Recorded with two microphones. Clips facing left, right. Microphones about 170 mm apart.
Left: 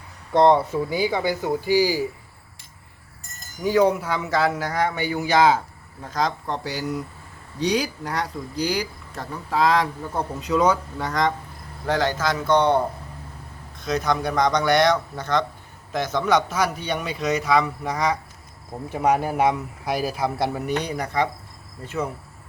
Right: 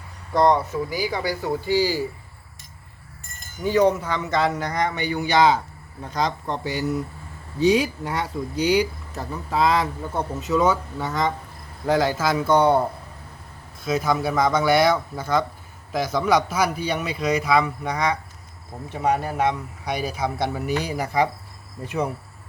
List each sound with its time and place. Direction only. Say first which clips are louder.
0.3 s speech: left 2 dB; 25° left (ahead or behind)
3.6 s speech: even; 10° left (ahead or behind); by 22.1 s 15° right (ahead or behind)